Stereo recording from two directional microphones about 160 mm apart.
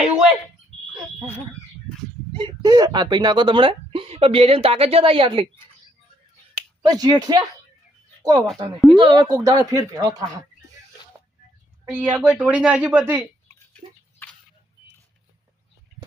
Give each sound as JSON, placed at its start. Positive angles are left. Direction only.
{"t": 2.3, "sound": "a woman's voice", "side_deg": -30}
{"t": 6.5, "sound": "finger snapping", "side_deg": -25}
{"t": 8.2, "sound": "speech", "side_deg": -25}
{"t": 11.9, "sound": "speech", "side_deg": -10}
{"t": 13.7, "sound": "a sound", "side_deg": 5}